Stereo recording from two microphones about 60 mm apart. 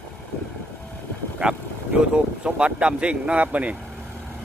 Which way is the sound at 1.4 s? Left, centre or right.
Right.